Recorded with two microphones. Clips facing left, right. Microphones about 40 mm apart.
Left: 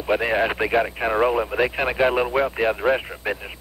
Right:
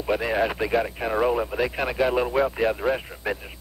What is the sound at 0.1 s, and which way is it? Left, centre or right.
Speech, left.